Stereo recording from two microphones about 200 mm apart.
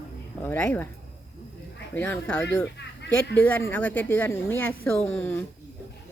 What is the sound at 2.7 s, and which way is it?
Fowl, 60° left (ahead or behind).